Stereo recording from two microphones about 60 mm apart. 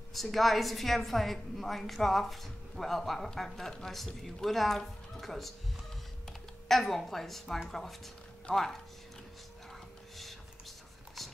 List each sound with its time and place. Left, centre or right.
0.1 s a woman's voice: centre
6.7 s a woman's voice: centre
8.5 s speech: left
11.2 s a sound: centre